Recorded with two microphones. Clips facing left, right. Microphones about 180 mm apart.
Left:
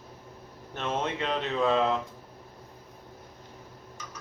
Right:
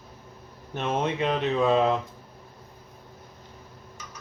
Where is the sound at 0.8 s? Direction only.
15° right (ahead or behind).